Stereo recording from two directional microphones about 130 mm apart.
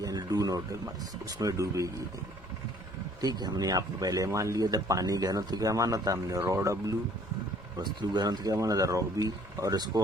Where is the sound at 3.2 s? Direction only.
30° right (ahead or behind).